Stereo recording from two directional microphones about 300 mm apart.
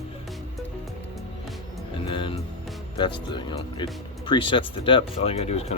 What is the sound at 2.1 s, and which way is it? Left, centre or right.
Music, centre.